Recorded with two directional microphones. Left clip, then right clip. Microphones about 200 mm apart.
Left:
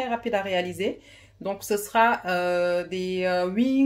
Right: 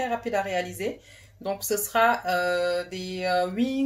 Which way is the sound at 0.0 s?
30° left (ahead or behind).